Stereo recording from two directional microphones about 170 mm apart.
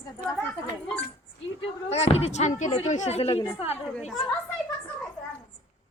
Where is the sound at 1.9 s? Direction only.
35° left (ahead or behind).